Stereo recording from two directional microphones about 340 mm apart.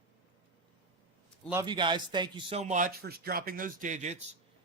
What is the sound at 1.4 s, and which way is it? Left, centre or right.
A man's voice, centre.